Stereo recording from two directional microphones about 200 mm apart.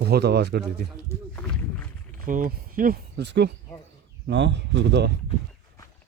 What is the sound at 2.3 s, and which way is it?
Speech, 40° right (ahead or behind).